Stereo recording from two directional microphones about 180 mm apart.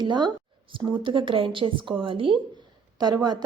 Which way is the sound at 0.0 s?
25° right (ahead or behind).